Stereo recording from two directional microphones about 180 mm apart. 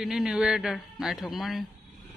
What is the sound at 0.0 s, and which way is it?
Speech, centre (ahead or behind).